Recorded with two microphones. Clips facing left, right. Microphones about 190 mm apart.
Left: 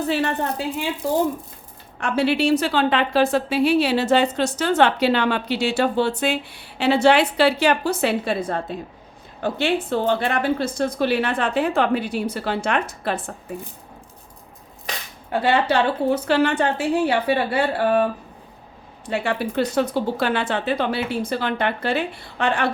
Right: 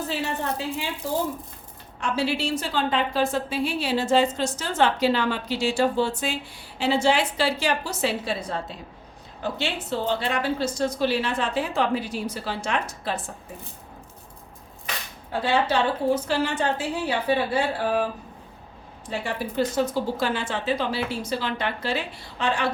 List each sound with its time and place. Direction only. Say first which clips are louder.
0.1 s a woman's voice: left 8 dB; 65° left (ahead or behind)
2.0 s a woman's voice: left 5 dB; 60° left (ahead or behind)
15.3 s a woman's voice: left 4 dB; 65° left (ahead or behind)